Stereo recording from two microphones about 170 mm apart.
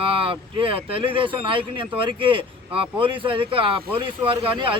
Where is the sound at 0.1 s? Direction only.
30° right (ahead or behind).